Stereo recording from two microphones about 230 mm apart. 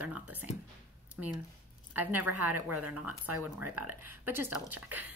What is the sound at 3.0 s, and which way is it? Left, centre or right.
Speech, right.